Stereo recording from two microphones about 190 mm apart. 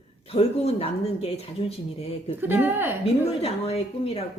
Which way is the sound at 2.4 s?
10° right (ahead or behind).